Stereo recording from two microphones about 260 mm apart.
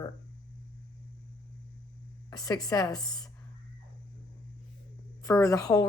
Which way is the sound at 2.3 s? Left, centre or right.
Centre.